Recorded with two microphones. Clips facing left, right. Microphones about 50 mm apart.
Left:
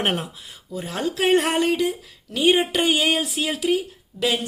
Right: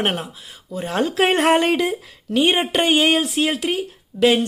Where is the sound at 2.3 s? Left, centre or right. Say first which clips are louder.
Right 1 dB; right.